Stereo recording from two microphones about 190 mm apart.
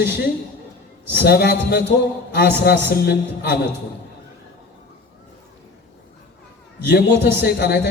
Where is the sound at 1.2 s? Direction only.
60° left (ahead or behind).